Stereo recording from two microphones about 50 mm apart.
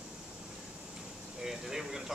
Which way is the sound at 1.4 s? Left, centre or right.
Centre.